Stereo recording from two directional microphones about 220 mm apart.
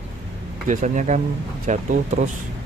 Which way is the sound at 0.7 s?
35° right (ahead or behind).